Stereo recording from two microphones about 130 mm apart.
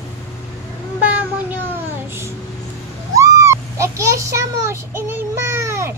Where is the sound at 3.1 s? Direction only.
25° right (ahead or behind).